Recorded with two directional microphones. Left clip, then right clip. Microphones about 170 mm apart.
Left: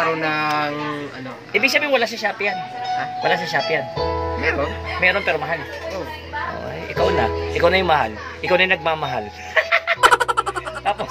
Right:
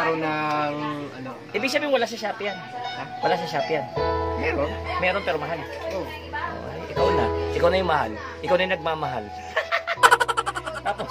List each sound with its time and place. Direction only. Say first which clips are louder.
0.2 s speech: left 4 dB; 10° right (ahead or behind)
1.5 s speech: left 6 dB; 10° left (ahead or behind)
4.4 s speech: left 4 dB; 15° right (ahead or behind)
5.0 s speech: left 7 dB; 10° left (ahead or behind)
7.0 s speech: left 3 dB; 15° left (ahead or behind)
10.0 s frog: left 1 dB; centre (ahead or behind)